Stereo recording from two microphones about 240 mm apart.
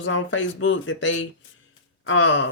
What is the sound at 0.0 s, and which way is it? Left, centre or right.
Speech, left.